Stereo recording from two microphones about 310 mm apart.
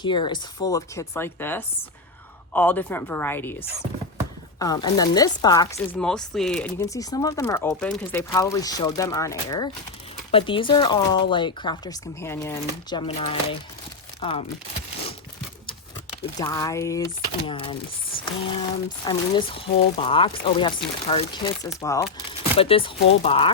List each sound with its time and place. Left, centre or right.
0.0 s speech: centre
4.6 s speech: centre
16.4 s speech: centre
19.0 s speech: centre